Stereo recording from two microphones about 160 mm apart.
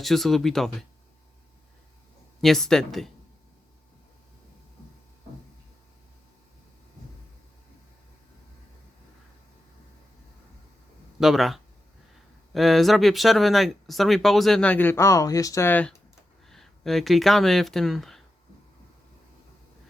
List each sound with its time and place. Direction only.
0.0 s speech: centre (ahead or behind)
2.4 s speech: centre (ahead or behind)
11.2 s speech: centre (ahead or behind)
16.5 s speech: centre (ahead or behind)